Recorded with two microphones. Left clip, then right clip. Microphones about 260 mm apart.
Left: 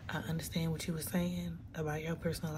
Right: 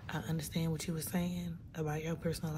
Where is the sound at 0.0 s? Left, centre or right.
Centre.